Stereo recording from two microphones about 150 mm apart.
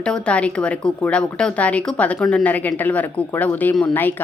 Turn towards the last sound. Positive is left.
turn(degrees=10)  # may be behind; listen again after turning